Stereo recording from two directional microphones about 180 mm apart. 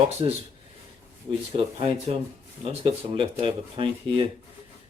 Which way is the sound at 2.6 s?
30° right (ahead or behind).